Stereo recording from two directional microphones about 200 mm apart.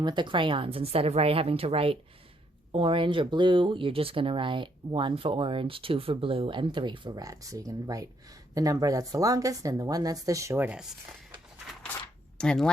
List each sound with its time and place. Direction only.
0.0 s speech: 20° right (ahead or behind)
12.4 s speech: 5° left (ahead or behind)